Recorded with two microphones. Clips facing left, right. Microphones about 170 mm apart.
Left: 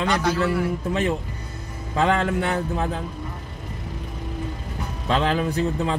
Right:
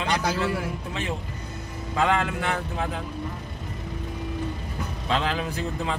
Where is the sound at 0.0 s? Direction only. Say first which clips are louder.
Left 4 dB; 40° left (ahead or behind).